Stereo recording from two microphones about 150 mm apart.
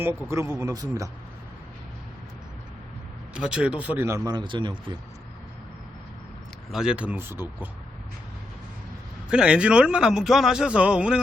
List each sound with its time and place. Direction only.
0.0 s speech: 15° right (ahead or behind)
3.3 s speech: 5° right (ahead or behind); by 4.9 s 30° right (ahead or behind)
6.7 s speech: 5° right (ahead or behind)
9.3 s a man's voice: 5° right (ahead or behind)